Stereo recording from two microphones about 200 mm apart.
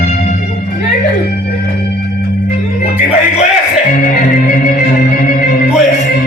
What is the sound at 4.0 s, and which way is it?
Music, 40° left (ahead or behind).